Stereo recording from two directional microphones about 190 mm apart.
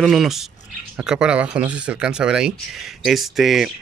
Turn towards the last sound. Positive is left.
turn(degrees=0)  # may be behind; listen again after turning